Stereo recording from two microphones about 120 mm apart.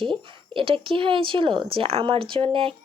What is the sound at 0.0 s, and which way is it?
Speech, 45° right (ahead or behind).